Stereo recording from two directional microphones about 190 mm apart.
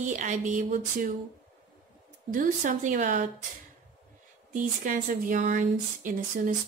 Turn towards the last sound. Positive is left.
turn(degrees=-45)  # may be behind; listen again after turning